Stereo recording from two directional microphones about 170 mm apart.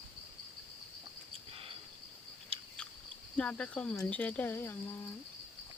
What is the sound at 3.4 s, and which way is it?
Speech, 5° left (ahead or behind).